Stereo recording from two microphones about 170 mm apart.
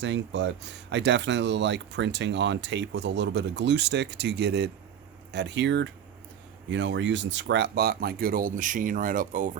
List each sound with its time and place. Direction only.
0.0 s speech: 90° right
5.3 s speech: 90° right; by 9.5 s 50° right (ahead or behind)